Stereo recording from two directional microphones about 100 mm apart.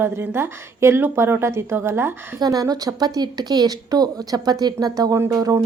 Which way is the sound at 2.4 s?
40° right (ahead or behind).